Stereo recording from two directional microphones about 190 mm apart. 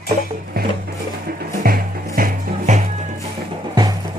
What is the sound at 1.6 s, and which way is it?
Music, 50° right (ahead or behind).